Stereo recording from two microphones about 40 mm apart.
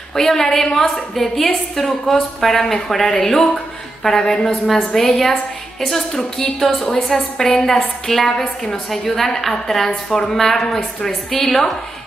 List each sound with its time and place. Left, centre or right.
0.1 s a woman's voice: centre